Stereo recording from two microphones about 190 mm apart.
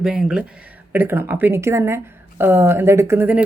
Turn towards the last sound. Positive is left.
turn(degrees=-10)  # may be behind; listen again after turning